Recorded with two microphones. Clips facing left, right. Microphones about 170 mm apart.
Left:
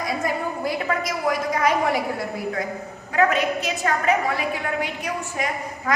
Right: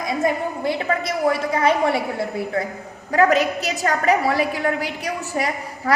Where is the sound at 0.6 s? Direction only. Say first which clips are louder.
Right 3 dB; 25° right (ahead or behind).